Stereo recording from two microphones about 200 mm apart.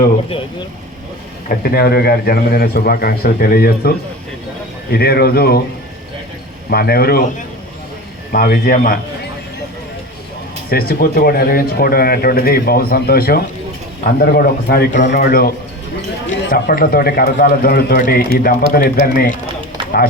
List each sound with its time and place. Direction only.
1.5 s speech: 50° left (ahead or behind)
6.7 s speech: 50° left (ahead or behind)
8.3 s speech: 45° left (ahead or behind)
10.7 s speech: 50° left (ahead or behind)